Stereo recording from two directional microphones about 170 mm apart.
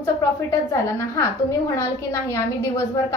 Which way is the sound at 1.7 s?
15° left (ahead or behind).